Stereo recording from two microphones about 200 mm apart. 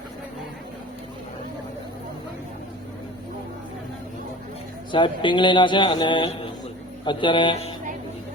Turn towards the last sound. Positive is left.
turn(degrees=25)  # may be behind; listen again after turning